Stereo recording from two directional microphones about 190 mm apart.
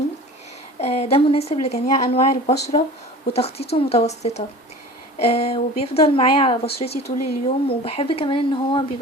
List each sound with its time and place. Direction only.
0.8 s a woman's voice: 35° left (ahead or behind)